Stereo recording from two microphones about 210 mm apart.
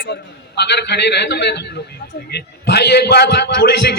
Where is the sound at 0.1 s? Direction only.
55° left (ahead or behind).